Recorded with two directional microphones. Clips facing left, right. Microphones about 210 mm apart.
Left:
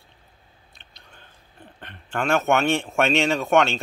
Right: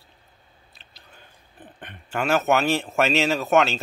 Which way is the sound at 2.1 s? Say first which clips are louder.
Even; 5° right (ahead or behind).